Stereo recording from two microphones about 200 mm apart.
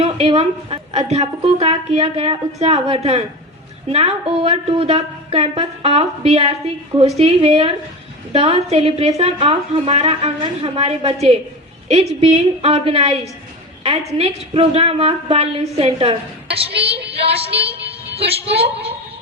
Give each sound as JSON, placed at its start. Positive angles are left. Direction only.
{"t": 0.0, "sound": "a woman's voice", "side_deg": -30}